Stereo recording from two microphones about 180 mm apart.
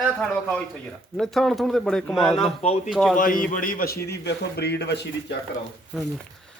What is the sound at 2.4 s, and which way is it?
Speech, 35° left (ahead or behind).